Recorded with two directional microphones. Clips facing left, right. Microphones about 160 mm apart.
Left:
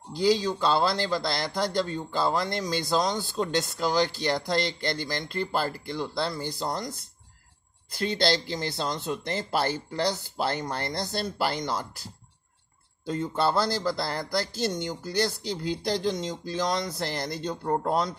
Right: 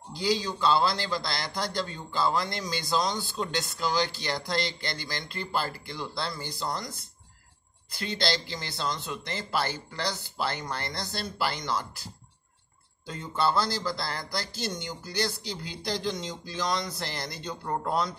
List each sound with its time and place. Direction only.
0.2 s a man's voice: 45° left (ahead or behind)
8.0 s a man's voice: 50° left (ahead or behind)
13.0 s a man's voice: 40° left (ahead or behind)